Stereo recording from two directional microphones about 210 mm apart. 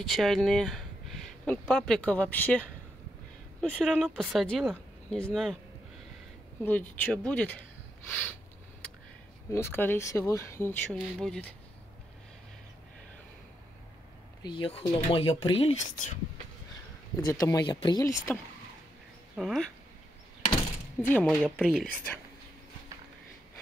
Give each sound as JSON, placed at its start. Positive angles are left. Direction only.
{"t": 0.0, "sound": "speech", "side_deg": 0}
{"t": 3.6, "sound": "speech", "side_deg": 0}
{"t": 6.6, "sound": "speech", "side_deg": 10}
{"t": 9.5, "sound": "speech", "side_deg": 10}
{"t": 14.4, "sound": "speech", "side_deg": 25}
{"t": 17.2, "sound": "speech", "side_deg": 15}
{"t": 19.3, "sound": "speech", "side_deg": 0}
{"t": 21.0, "sound": "speech", "side_deg": 5}